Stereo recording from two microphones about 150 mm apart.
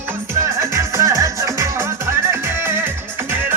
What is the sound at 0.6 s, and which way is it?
Music, 20° right (ahead or behind).